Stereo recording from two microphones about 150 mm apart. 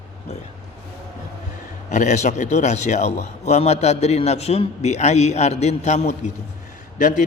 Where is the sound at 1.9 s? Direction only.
55° left (ahead or behind).